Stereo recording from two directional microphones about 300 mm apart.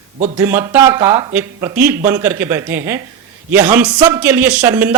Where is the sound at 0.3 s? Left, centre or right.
Centre.